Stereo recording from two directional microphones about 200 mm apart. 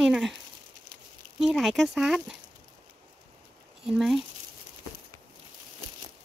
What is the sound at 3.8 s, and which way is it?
Speech, 5° right (ahead or behind).